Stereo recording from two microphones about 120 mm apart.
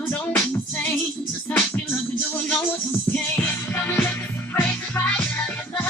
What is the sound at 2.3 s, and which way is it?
Music, 15° left (ahead or behind).